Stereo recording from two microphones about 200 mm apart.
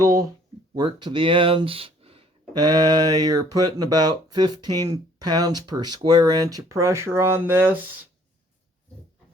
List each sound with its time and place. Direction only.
0.0 s speech: 15° right (ahead or behind)